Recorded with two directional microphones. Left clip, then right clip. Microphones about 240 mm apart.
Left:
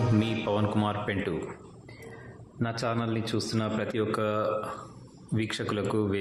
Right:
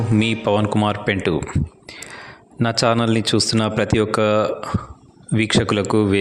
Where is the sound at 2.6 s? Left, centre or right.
Right.